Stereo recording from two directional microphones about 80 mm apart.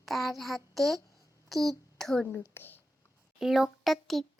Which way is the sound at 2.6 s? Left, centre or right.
Left.